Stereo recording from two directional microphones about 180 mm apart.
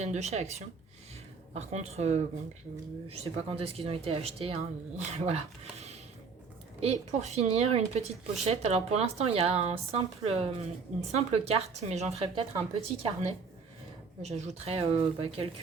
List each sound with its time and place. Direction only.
0.0 s speech: 40° right (ahead or behind)
1.5 s speech: 35° right (ahead or behind)